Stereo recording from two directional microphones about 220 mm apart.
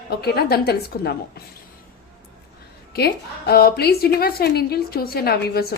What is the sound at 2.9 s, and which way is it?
A woman's voice, 45° left (ahead or behind).